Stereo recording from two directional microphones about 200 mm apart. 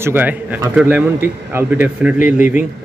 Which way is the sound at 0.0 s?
10° right (ahead or behind).